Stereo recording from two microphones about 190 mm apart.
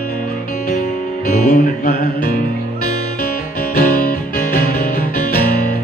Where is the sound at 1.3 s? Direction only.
40° left (ahead or behind).